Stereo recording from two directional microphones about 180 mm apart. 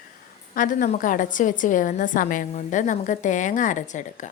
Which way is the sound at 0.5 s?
45° left (ahead or behind).